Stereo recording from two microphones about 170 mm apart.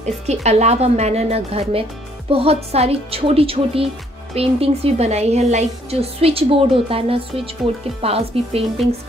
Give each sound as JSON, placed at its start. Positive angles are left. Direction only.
{"t": 0.3, "sound": "a woman's voice", "side_deg": -40}